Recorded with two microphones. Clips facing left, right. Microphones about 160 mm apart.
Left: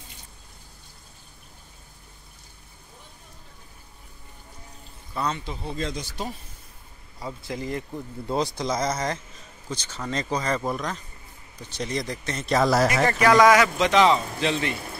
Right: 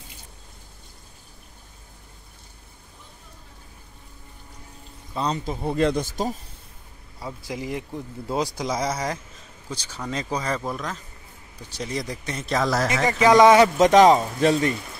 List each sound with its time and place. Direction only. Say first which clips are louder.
5.3 s speech: right 6 dB; 45° right (ahead or behind)
7.2 s speech: even; 5° right (ahead or behind)
12.5 s speech: left 3 dB; 5° left (ahead or behind)
13.0 s speech: right 4 dB; 15° right (ahead or behind)
13.7 s speech: right 5 dB; 45° right (ahead or behind)